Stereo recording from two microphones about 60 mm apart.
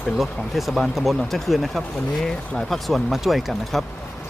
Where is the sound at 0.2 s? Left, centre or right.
Centre.